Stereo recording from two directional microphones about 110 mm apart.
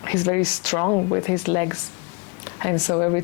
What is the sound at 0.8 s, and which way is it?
Speech, 30° left (ahead or behind).